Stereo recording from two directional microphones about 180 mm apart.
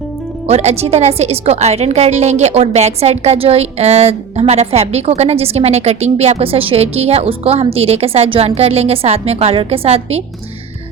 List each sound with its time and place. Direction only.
0.4 s a woman's voice: 35° right (ahead or behind)